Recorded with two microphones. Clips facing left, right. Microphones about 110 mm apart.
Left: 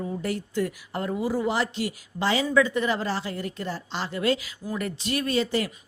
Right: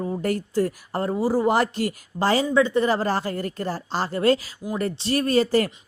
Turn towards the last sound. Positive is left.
turn(degrees=-45)  # may be behind; listen again after turning